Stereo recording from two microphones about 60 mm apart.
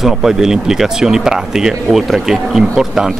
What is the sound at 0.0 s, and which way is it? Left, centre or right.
A woman's voice, centre.